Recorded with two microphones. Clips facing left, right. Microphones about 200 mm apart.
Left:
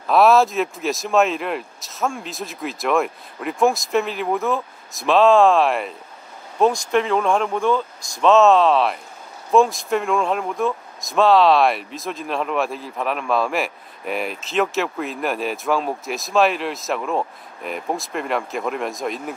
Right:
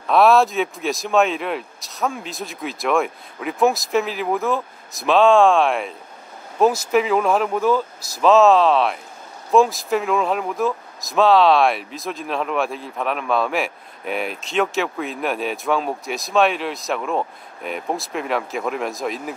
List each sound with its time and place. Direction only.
0.0 s speech: centre (ahead or behind)